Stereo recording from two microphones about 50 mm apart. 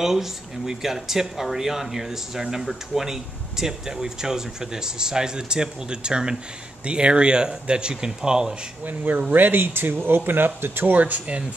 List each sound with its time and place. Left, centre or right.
0.0 s speech: centre
8.8 s speech: right
10.9 s speech: right